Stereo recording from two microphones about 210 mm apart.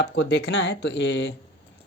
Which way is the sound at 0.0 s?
55° left (ahead or behind).